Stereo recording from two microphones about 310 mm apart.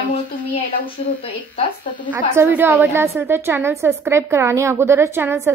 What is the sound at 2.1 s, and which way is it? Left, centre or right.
A woman's voice, centre.